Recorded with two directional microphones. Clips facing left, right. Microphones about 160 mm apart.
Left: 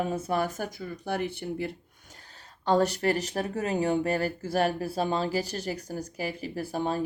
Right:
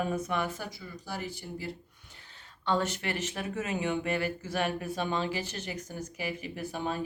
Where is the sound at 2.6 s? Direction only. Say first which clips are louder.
Left 6 dB; 40° left (ahead or behind).